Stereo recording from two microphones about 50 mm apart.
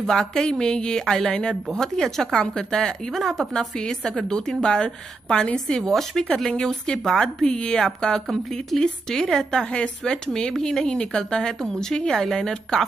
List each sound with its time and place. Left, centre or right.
0.0 s a woman's voice: centre
3.2 s a woman's voice: centre
3.7 s a woman's voice: centre
5.9 s a woman's voice: centre
9.6 s a woman's voice: centre